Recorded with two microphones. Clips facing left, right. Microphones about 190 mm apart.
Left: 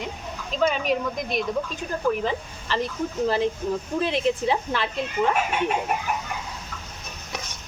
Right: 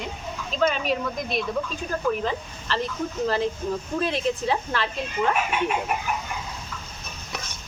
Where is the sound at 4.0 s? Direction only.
15° left (ahead or behind).